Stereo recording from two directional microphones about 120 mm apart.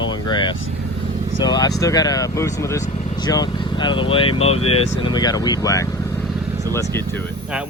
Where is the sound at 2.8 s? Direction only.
65° left (ahead or behind).